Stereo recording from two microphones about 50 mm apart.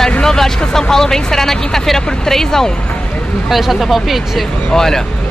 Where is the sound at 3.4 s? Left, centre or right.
Centre.